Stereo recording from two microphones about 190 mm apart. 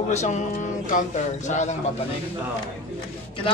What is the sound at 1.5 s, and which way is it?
Speech, 40° left (ahead or behind).